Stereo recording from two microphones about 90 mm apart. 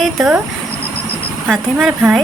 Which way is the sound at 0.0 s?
Centre (ahead or behind).